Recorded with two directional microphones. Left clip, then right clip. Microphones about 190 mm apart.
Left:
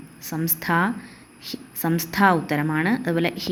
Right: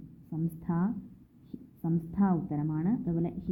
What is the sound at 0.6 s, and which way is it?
Speech, 15° left (ahead or behind).